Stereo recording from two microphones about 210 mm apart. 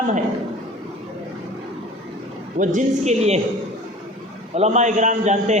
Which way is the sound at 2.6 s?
35° right (ahead or behind).